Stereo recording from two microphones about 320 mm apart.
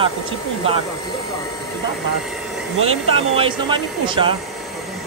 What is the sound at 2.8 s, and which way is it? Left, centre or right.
Speech, centre.